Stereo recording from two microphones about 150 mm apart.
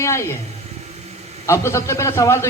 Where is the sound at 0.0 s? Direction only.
20° left (ahead or behind).